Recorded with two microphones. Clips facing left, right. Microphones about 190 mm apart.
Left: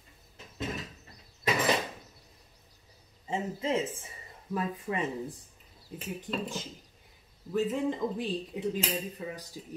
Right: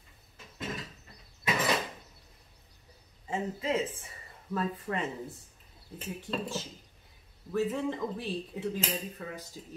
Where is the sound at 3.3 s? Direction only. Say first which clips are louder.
Left 1 dB; 25° left (ahead or behind).